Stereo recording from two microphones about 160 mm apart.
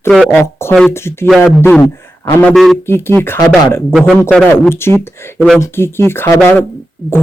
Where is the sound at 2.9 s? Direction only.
15° left (ahead or behind).